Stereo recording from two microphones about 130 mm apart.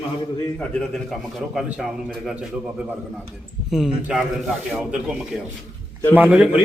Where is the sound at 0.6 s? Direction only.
5° left (ahead or behind).